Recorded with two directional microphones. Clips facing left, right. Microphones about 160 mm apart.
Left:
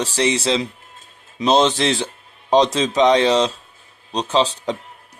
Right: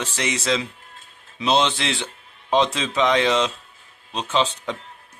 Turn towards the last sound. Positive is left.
turn(degrees=35)  # may be behind; listen again after turning